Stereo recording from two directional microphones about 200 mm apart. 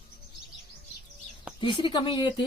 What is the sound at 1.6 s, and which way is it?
Speech, 25° left (ahead or behind).